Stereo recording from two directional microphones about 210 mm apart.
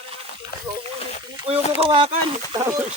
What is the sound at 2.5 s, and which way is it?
Speech, 15° right (ahead or behind).